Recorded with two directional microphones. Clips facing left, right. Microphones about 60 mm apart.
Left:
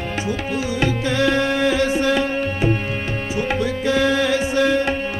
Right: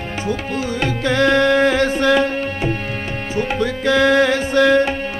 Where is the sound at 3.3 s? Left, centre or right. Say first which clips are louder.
Right 2 dB; right.